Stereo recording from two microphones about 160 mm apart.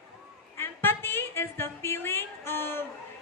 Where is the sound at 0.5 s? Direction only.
15° left (ahead or behind).